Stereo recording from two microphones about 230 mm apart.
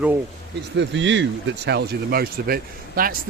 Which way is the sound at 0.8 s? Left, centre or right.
Right.